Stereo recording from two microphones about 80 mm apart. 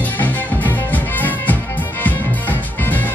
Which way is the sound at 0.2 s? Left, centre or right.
Left.